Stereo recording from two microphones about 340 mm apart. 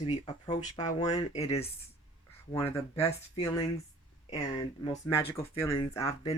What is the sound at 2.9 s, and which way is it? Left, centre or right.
Speech, centre.